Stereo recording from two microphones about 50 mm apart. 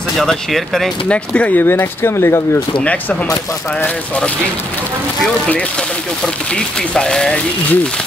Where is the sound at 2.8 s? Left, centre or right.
Left.